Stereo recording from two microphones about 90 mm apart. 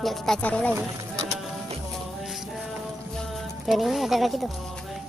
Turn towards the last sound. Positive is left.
turn(degrees=0)  # may be behind; listen again after turning